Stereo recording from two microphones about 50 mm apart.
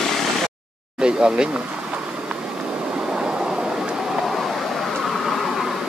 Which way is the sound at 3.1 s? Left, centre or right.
Centre.